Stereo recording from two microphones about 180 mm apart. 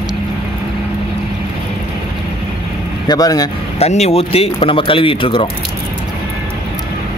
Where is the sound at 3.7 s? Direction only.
35° left (ahead or behind).